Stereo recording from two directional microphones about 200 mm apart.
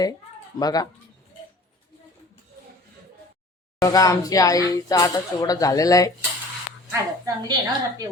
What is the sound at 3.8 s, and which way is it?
Speech, 20° left (ahead or behind).